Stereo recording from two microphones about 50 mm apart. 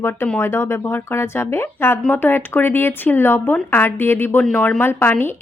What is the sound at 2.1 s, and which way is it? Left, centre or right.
Speech, left.